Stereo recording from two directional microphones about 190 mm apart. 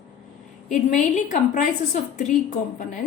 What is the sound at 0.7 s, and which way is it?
A woman's voice, 40° left (ahead or behind).